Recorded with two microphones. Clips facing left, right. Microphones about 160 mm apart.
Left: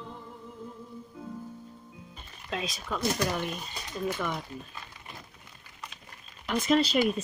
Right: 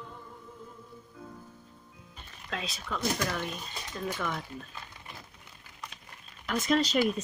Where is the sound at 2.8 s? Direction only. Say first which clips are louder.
Left 2 dB; 10° left (ahead or behind).